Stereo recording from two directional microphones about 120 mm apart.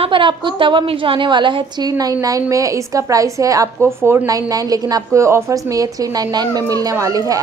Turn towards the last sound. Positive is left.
turn(degrees=-30)  # may be behind; listen again after turning